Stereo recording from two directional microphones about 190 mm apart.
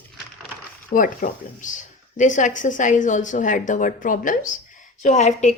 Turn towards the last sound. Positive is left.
turn(degrees=40)  # may be behind; listen again after turning